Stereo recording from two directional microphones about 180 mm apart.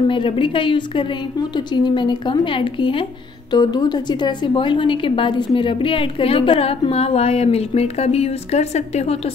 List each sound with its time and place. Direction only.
0.1 s a woman's voice: 25° left (ahead or behind)